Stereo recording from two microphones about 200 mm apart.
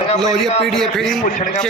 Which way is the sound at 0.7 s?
Centre (ahead or behind).